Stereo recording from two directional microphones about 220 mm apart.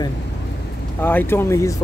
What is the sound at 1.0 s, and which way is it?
Speech, 10° left (ahead or behind).